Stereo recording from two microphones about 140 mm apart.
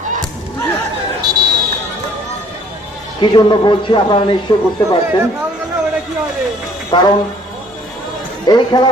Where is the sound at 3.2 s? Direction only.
30° left (ahead or behind).